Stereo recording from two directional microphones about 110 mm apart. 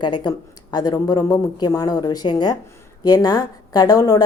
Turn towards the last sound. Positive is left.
turn(degrees=35)  # may be behind; listen again after turning